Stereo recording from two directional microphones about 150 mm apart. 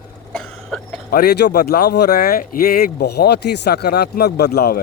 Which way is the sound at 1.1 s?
90° left.